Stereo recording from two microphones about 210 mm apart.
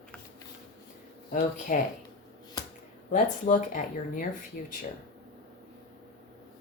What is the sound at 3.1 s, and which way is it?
Speech, 40° left (ahead or behind).